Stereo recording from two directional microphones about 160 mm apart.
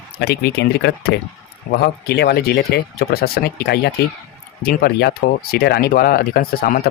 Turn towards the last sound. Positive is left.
turn(degrees=65)  # may be behind; listen again after turning